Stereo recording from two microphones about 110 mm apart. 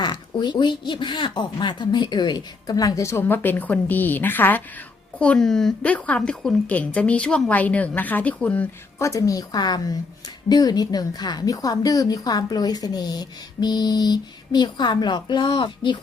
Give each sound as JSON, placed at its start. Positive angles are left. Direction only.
{"t": 0.0, "sound": "a woman's voice", "side_deg": 40}
{"t": 9.0, "sound": "a woman's voice", "side_deg": 30}